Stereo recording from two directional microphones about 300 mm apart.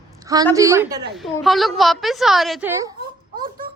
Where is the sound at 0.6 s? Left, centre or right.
Centre.